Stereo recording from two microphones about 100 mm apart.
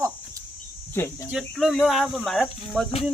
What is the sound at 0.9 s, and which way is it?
Speech, 25° left (ahead or behind).